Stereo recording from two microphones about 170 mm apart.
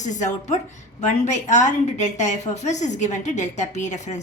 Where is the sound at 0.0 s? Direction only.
45° left (ahead or behind).